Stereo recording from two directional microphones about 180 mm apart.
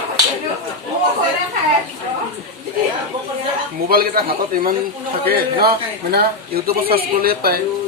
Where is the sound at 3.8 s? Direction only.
55° right (ahead or behind).